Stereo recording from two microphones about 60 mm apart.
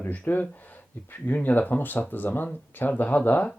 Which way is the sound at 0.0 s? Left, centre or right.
Left.